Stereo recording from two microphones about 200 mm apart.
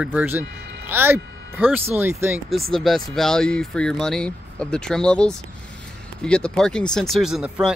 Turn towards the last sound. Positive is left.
turn(degrees=-5)  # may be behind; listen again after turning